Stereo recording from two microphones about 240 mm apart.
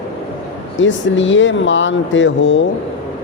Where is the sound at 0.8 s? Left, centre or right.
Left.